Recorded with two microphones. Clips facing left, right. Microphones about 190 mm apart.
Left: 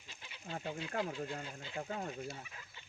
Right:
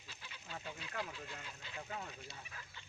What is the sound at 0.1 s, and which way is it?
Goat, 25° left (ahead or behind).